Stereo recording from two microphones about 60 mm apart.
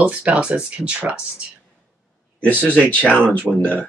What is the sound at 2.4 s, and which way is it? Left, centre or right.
Speech, left.